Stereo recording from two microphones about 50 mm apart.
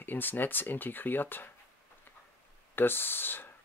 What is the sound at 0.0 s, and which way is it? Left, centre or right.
Speech, left.